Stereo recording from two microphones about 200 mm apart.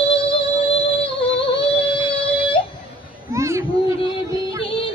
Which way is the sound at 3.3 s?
15° right (ahead or behind).